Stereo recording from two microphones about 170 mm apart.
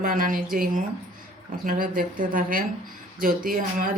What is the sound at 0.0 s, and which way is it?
Speech, 55° right (ahead or behind).